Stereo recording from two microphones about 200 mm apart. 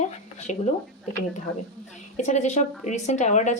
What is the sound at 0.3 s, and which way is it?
Speech, 35° left (ahead or behind).